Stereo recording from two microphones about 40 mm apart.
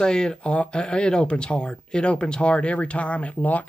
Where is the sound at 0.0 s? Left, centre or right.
Centre.